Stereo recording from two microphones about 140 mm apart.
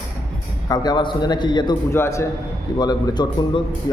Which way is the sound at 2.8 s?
30° left (ahead or behind).